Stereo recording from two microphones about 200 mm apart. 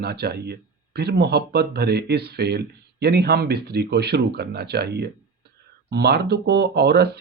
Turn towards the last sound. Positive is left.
turn(degrees=-55)  # may be behind; listen again after turning